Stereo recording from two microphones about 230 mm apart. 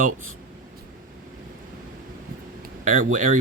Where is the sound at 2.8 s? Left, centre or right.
Right.